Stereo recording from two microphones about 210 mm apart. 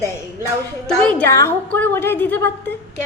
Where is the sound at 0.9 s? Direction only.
5° left (ahead or behind).